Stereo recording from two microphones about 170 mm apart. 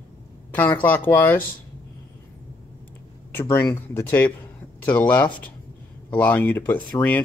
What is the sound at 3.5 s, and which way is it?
Speech, 15° left (ahead or behind).